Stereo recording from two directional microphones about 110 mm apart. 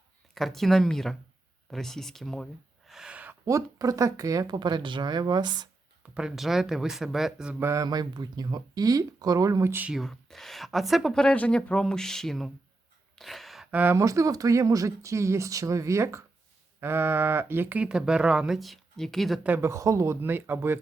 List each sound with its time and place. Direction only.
0.3 s speech: centre (ahead or behind)
3.4 s speech: 30° right (ahead or behind)
6.1 s speech: 5° right (ahead or behind)
7.6 s speech: 25° right (ahead or behind)
7.9 s speech: 40° right (ahead or behind)
9.8 s speech: centre (ahead or behind)
13.1 s a sound: centre (ahead or behind)
13.7 s speech: 15° right (ahead or behind)
14.0 s speech: 30° right (ahead or behind); by 19.4 s centre (ahead or behind)
19.4 s speech: 15° right (ahead or behind)
19.7 s speech: 30° right (ahead or behind)